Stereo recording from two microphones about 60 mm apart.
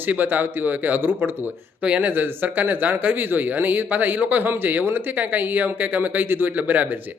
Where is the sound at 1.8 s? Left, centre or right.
Right.